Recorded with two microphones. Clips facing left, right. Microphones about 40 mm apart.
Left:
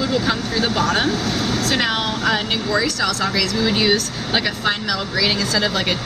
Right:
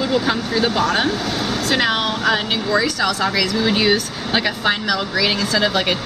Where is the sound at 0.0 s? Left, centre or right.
Centre.